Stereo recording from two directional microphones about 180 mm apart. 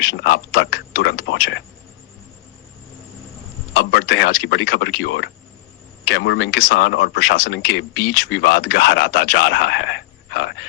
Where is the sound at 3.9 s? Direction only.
90° left.